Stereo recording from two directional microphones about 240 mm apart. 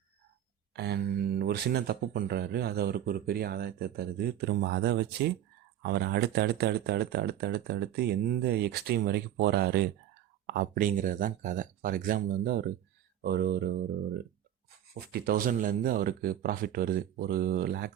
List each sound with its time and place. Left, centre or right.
0.7 s speech: right